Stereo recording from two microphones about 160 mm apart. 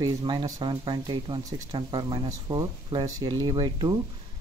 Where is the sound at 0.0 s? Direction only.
25° right (ahead or behind).